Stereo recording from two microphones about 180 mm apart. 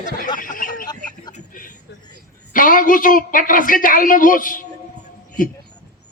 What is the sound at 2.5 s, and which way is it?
Speech, 50° left (ahead or behind).